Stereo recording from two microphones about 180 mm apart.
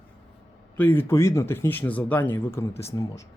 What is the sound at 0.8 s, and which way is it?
Speech, 10° left (ahead or behind).